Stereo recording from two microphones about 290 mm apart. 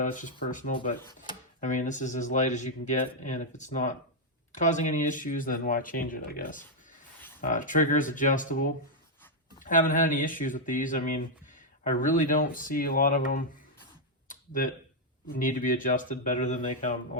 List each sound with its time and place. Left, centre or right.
0.0 s speech: left
0.8 s speech: centre
14.3 s a sound: left
15.3 s speech: left